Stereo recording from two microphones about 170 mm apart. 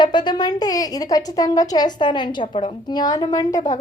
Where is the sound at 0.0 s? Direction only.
25° left (ahead or behind).